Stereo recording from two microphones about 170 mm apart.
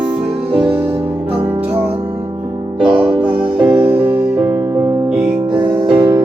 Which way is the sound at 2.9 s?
30° right (ahead or behind).